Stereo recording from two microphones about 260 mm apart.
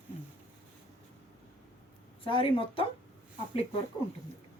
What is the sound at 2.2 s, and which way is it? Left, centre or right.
Speech, left.